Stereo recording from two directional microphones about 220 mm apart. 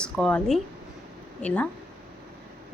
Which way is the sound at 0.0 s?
5° left (ahead or behind).